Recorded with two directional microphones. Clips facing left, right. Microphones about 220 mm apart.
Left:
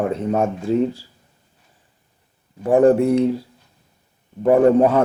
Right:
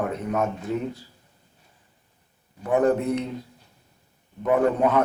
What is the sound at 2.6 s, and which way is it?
Speech, 30° left (ahead or behind).